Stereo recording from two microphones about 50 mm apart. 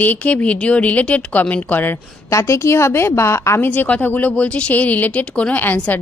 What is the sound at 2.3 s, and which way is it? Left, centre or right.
A woman's voice, left.